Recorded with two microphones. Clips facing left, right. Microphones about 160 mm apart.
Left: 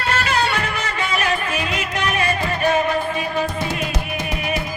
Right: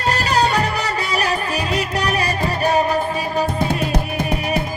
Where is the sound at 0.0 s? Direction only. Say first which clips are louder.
Right 3 dB; 40° right (ahead or behind).